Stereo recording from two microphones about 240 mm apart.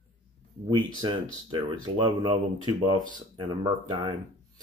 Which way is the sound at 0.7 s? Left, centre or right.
Centre.